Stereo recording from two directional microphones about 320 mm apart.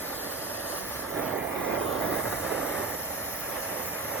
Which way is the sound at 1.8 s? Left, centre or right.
Right.